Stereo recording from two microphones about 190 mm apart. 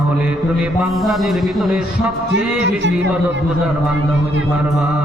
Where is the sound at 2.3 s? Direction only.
65° right (ahead or behind).